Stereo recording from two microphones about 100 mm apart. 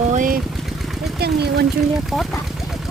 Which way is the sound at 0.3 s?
Centre (ahead or behind).